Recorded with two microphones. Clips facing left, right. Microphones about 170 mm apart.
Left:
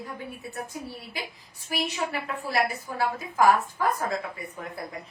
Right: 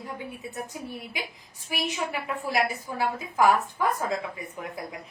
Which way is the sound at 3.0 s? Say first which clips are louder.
Even; 15° right (ahead or behind).